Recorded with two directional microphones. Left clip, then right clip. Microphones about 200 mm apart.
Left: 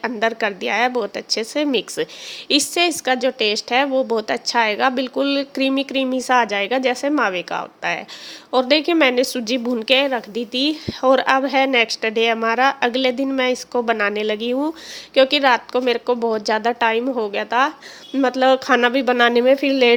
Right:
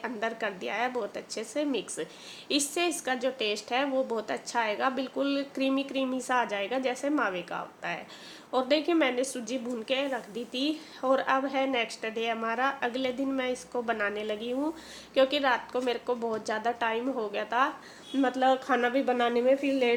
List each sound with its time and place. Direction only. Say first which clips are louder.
0.0 s a woman's voice: left 12 dB; 35° left (ahead or behind); by 20.0 s 55° left (ahead or behind)